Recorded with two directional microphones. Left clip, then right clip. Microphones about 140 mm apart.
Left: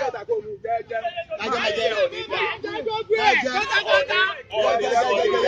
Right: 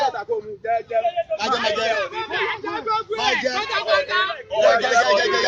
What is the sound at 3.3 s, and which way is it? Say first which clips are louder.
A man's voice: left 1 dB; centre (ahead or behind).